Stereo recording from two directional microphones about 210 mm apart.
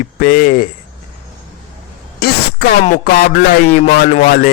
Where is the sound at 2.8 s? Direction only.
40° left (ahead or behind).